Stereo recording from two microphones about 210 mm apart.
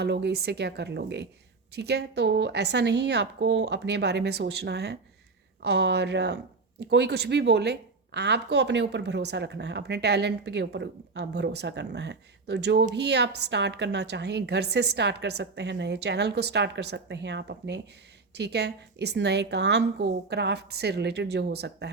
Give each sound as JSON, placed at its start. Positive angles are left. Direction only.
{"t": 0.0, "sound": "speech", "side_deg": -50}